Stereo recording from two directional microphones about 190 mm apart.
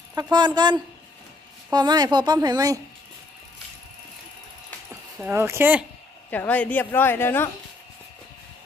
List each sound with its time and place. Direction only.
0.1 s speech: 20° right (ahead or behind)
4.9 s speech: 10° right (ahead or behind)
6.3 s a woman's voice: 10° left (ahead or behind)